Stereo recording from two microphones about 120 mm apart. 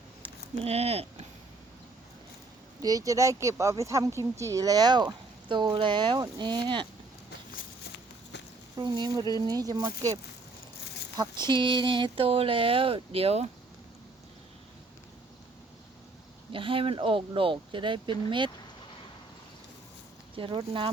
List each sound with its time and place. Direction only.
0.2 s a sound: 60° right (ahead or behind)
2.8 s speech: 30° right (ahead or behind)
8.8 s speech: 35° right (ahead or behind)
11.2 s speech: 35° right (ahead or behind); by 13.5 s 60° right (ahead or behind)
16.5 s speech: 45° right (ahead or behind)
20.3 s speech: 45° right (ahead or behind)